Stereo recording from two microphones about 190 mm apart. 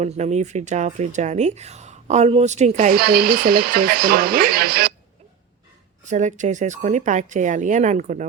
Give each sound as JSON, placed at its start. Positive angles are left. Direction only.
{"t": 0.0, "sound": "speech", "side_deg": -35}
{"t": 6.1, "sound": "speech", "side_deg": -40}